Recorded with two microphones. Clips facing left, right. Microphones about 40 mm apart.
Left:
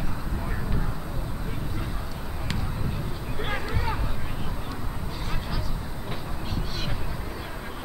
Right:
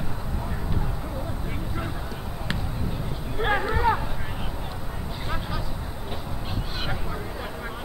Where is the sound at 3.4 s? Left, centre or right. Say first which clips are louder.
Right 8 dB; right.